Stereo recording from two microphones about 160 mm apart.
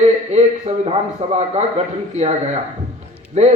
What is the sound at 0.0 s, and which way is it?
A man's voice, 45° right (ahead or behind).